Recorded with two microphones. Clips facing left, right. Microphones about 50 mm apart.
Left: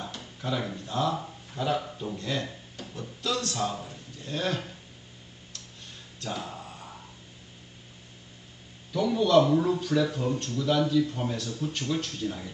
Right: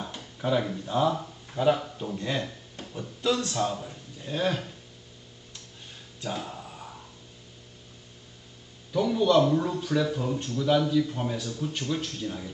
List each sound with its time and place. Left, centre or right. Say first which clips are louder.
0.0 s a sound: right 4 dB; centre
1.5 s a man's voice: right 5 dB; centre
3.6 s a man's voice: right 2 dB; centre
6.1 s music: right 1 dB; centre
8.9 s speech: right 1 dB; centre